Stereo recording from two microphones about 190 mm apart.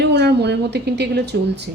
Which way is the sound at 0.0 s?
60° right (ahead or behind).